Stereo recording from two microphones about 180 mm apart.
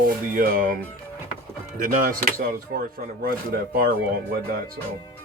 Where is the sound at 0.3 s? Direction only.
50° right (ahead or behind).